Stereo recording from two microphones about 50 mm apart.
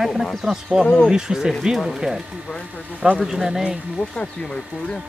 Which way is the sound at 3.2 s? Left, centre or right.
Centre.